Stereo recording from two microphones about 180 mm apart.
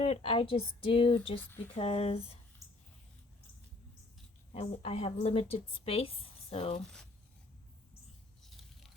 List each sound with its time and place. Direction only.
0.0 s a woman's voice: 35° left (ahead or behind)
1.4 s speech: 10° left (ahead or behind)
1.7 s a woman's voice: 30° left (ahead or behind)
4.5 s a woman's voice: 30° left (ahead or behind)